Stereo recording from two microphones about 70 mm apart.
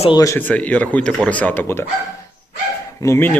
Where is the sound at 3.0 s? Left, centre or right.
Left.